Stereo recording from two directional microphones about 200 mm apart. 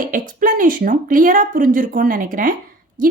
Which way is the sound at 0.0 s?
40° right (ahead or behind).